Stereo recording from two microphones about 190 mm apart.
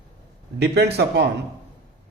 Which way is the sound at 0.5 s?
60° right (ahead or behind).